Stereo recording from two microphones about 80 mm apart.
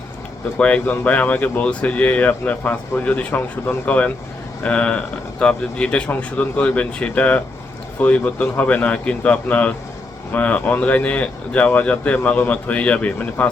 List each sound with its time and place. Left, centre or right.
0.6 s speech: centre